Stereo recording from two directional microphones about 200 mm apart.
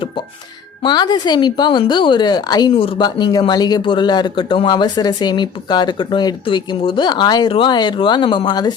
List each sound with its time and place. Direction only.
0.8 s speech: 20° left (ahead or behind)